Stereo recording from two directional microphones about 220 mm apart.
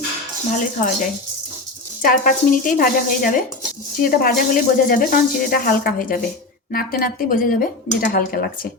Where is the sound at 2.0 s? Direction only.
40° left (ahead or behind).